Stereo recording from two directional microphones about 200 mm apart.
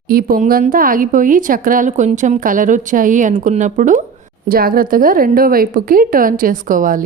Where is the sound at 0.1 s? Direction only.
45° right (ahead or behind).